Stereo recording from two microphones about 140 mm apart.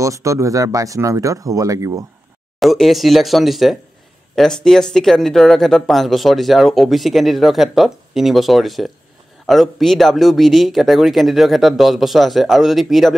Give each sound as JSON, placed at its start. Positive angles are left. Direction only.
{"t": 0.0, "sound": "speech", "side_deg": -20}
{"t": 2.6, "sound": "speech", "side_deg": 0}